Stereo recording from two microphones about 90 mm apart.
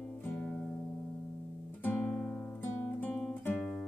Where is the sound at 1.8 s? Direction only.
20° left (ahead or behind).